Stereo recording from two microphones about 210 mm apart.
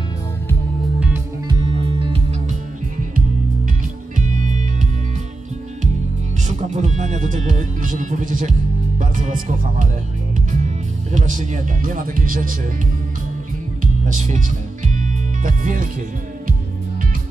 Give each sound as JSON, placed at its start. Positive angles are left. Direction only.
{"t": 0.9, "sound": "music", "side_deg": -5}
{"t": 1.5, "sound": "music", "side_deg": -20}
{"t": 4.2, "sound": "music", "side_deg": -35}
{"t": 6.4, "sound": "music", "side_deg": -35}
{"t": 9.0, "sound": "speech", "side_deg": -40}
{"t": 11.1, "sound": "speech", "side_deg": -35}
{"t": 14.0, "sound": "speech", "side_deg": -35}
{"t": 15.0, "sound": "music", "side_deg": -40}